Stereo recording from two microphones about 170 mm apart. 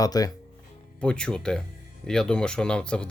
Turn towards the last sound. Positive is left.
turn(degrees=5)  # may be behind; listen again after turning